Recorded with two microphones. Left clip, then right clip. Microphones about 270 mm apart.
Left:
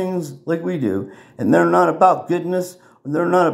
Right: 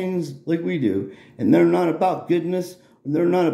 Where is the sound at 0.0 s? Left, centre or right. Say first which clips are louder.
Left 2 dB; centre.